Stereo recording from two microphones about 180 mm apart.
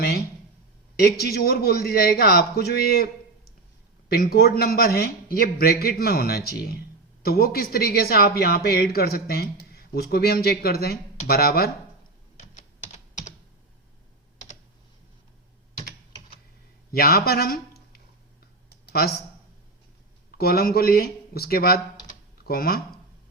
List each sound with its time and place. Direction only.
0.0 s a sound: 60° left (ahead or behind)
0.9 s a man's voice: 60° left (ahead or behind)
4.1 s a man's voice: 60° left (ahead or behind)
16.9 s speech: 55° left (ahead or behind)
18.7 s a sound: 65° left (ahead or behind)
20.4 s speech: 60° left (ahead or behind)